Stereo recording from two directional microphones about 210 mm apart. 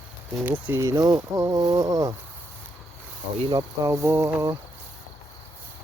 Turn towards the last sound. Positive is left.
turn(degrees=-15)  # may be behind; listen again after turning